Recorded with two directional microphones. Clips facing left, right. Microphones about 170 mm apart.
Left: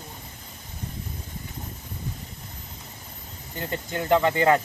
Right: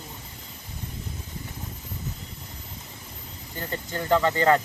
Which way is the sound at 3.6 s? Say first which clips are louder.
Left 2 dB; 20° left (ahead or behind).